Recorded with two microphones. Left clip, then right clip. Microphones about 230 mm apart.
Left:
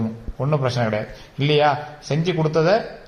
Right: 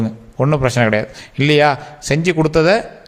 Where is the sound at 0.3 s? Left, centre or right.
Right.